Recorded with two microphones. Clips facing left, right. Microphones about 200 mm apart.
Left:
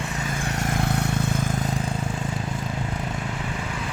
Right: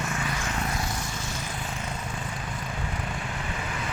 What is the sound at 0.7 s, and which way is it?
Vehicle, 60° left (ahead or behind).